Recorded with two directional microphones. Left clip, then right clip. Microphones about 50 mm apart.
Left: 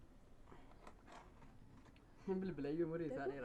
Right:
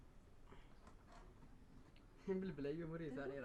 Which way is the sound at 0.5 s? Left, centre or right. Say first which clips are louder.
Left 5 dB; centre.